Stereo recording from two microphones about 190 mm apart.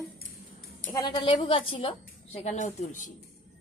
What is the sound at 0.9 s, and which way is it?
Speech, 25° left (ahead or behind).